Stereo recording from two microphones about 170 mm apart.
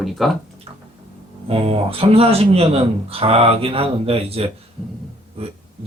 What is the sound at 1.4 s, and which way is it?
A man's voice, 35° right (ahead or behind).